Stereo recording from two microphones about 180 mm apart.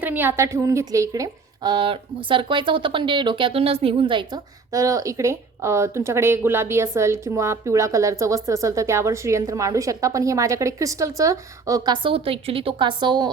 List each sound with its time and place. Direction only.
0.0 s a woman's voice: 10° right (ahead or behind)